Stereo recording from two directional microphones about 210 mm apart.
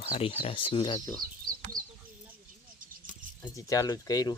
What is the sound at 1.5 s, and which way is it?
Chicken, 45° right (ahead or behind).